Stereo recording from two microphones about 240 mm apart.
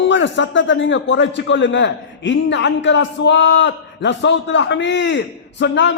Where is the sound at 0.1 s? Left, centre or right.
Left.